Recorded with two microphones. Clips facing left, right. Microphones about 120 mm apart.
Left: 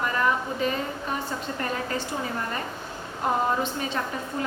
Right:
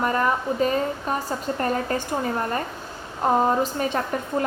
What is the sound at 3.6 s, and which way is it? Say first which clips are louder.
Speech: right 5 dB; 45° right (ahead or behind).